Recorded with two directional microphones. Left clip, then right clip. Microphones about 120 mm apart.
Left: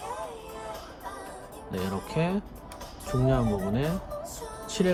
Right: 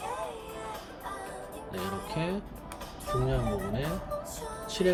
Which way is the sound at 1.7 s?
35° left (ahead or behind).